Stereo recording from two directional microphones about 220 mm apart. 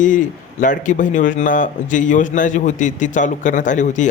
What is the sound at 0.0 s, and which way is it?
A man's voice, 35° left (ahead or behind).